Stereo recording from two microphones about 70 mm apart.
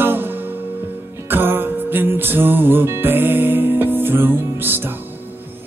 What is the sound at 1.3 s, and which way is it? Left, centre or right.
Music, right.